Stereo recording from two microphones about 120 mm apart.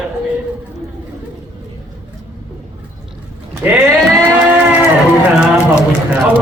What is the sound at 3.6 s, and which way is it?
Speech, 15° right (ahead or behind).